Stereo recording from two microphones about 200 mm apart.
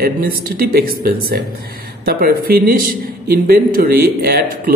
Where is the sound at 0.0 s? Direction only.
50° right (ahead or behind).